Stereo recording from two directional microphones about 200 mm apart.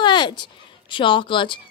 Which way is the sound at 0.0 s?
25° left (ahead or behind).